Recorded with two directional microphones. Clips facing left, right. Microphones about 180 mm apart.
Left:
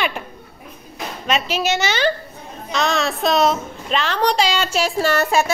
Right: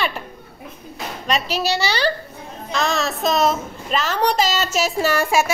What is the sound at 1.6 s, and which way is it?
Speech, 35° right (ahead or behind).